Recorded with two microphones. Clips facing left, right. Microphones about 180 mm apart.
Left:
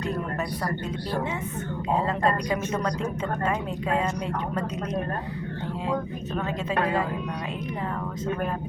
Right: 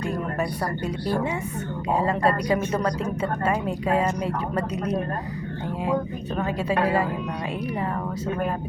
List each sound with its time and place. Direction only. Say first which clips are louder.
1.9 s speech: right 2 dB; 10° right (ahead or behind)
3.4 s speech: right 4 dB; 5° right (ahead or behind)
6.7 s speech: right 3 dB; 10° right (ahead or behind)